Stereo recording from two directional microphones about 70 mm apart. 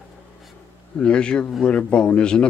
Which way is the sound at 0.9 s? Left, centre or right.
Centre.